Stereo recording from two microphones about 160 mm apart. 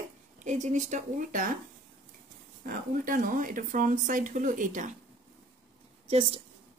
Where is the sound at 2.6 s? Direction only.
60° right (ahead or behind).